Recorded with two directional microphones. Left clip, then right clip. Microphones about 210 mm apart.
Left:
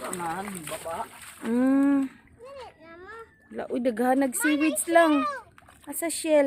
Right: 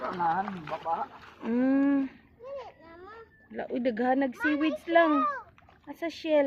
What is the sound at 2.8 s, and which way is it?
Baby cry, 45° left (ahead or behind).